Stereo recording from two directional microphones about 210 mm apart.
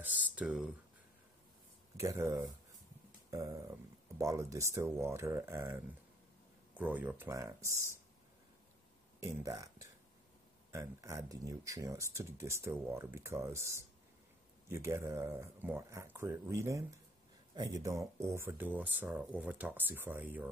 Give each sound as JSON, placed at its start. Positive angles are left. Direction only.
{"t": 0.0, "sound": "speech", "side_deg": -10}
{"t": 2.0, "sound": "speech", "side_deg": -15}
{"t": 9.2, "sound": "speech", "side_deg": -15}